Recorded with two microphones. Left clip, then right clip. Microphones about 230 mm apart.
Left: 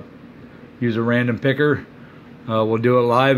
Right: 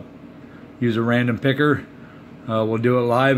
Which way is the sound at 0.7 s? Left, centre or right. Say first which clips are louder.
Left 1 dB; centre.